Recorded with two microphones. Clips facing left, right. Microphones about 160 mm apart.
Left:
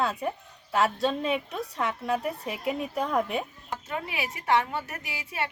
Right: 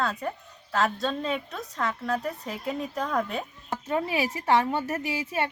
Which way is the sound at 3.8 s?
30° right (ahead or behind).